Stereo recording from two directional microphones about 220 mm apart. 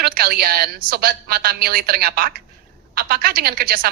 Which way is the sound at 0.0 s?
45° right (ahead or behind).